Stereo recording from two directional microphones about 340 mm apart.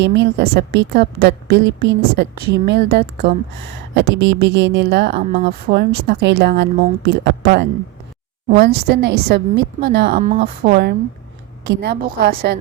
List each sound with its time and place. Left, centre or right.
0.0 s a woman's voice: right